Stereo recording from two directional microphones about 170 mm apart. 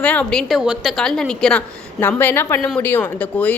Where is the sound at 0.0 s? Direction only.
5° left (ahead or behind).